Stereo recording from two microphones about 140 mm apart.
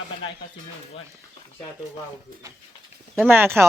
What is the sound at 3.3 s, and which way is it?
Speech, 15° right (ahead or behind).